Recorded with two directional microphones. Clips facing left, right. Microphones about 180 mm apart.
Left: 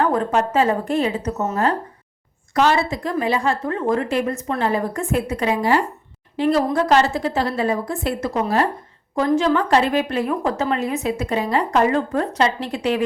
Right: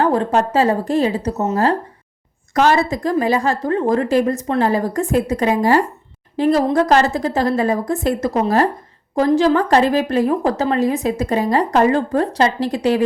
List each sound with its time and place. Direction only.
0.0 s a woman's voice: 30° right (ahead or behind)
2.6 s a woman's voice: 45° right (ahead or behind)